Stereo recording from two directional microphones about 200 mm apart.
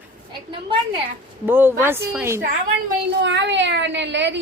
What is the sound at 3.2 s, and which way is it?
Speech, 60° right (ahead or behind).